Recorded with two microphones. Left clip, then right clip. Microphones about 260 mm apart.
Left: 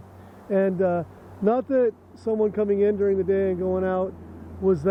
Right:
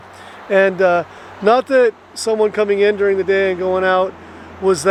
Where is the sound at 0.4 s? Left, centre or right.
Centre.